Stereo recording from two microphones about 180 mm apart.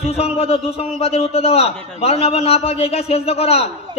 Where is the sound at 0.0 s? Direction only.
35° left (ahead or behind).